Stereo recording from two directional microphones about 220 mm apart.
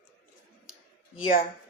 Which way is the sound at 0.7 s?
70° left (ahead or behind).